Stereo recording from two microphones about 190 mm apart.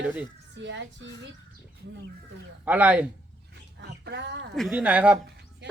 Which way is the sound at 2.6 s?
10° right (ahead or behind).